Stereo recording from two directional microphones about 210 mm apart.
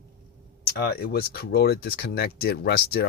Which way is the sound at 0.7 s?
50° left (ahead or behind).